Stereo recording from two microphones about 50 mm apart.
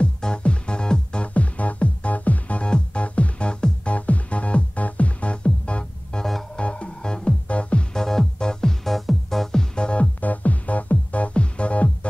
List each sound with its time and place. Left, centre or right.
0.0 s music: centre
6.2 s music: centre
6.6 s music: left
7.4 s music: left
7.9 s music: centre
10.2 s music: left